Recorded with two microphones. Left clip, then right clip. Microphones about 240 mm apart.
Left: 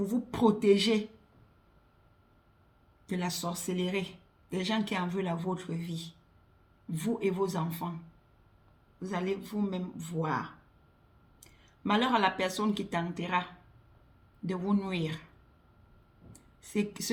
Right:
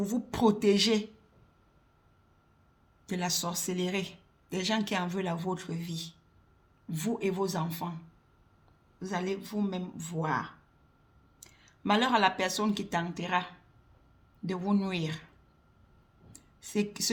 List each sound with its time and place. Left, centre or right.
0.0 s speech: right
3.1 s speech: right
9.0 s speech: right
16.3 s a sound: right